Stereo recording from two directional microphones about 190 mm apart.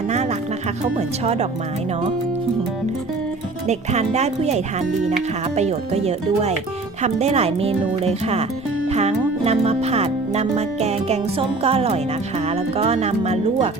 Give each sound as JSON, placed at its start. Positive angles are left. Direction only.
{"t": 0.1, "sound": "music", "side_deg": -35}
{"t": 0.9, "sound": "speech", "side_deg": -35}
{"t": 3.7, "sound": "speech", "side_deg": -35}